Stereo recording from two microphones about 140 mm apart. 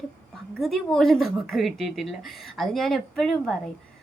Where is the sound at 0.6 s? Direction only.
Centre (ahead or behind).